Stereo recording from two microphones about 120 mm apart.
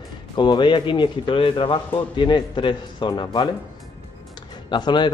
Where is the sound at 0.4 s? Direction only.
40° left (ahead or behind).